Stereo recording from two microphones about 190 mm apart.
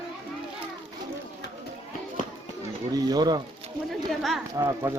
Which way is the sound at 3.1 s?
20° right (ahead or behind).